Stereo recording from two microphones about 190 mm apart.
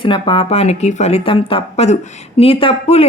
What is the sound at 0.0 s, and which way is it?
Speech, 25° left (ahead or behind).